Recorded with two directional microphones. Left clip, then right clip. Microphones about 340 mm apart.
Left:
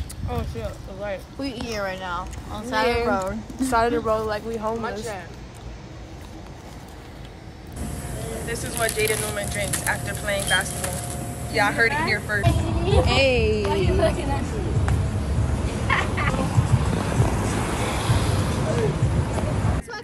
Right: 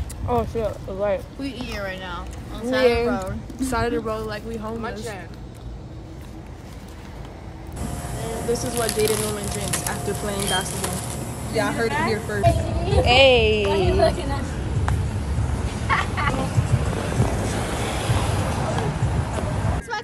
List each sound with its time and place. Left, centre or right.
0.3 s speech: centre
1.4 s speech: centre
3.6 s speech: centre
8.6 s speech: centre
10.7 s a sound: centre
12.3 s speech: centre
12.6 s music: centre
13.2 s speech: centre
13.6 s music: centre
15.3 s a sound: centre
17.0 s vehicle: centre